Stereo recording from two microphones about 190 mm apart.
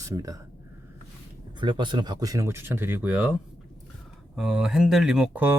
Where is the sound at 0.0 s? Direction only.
15° right (ahead or behind).